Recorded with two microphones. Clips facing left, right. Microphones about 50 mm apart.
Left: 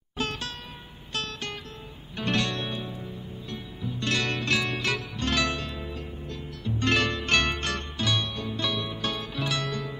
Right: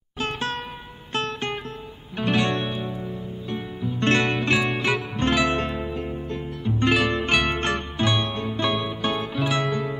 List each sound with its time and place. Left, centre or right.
0.2 s music: right
2.1 s music: centre
2.4 s music: right
4.3 s music: centre
5.6 s music: right
6.9 s music: centre
7.5 s music: right